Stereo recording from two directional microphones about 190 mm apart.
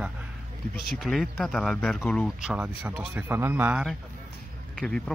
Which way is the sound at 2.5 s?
5° right (ahead or behind).